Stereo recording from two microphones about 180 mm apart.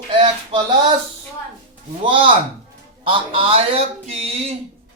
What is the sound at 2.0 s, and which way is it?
A man's voice, 30° right (ahead or behind).